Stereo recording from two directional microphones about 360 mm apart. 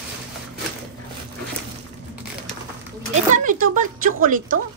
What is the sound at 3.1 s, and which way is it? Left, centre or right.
Speech, right.